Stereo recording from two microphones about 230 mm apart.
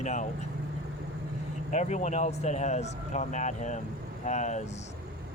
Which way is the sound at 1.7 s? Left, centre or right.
Left.